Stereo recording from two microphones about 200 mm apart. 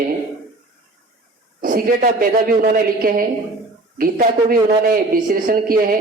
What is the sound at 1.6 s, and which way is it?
A man's voice, 45° right (ahead or behind).